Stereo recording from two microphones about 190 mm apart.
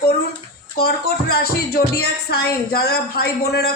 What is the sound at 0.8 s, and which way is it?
Speech, 55° left (ahead or behind).